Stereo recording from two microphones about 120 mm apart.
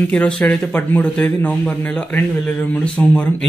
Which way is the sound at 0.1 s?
10° left (ahead or behind).